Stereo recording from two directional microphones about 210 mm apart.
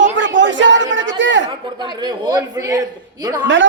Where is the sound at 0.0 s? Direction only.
60° right (ahead or behind).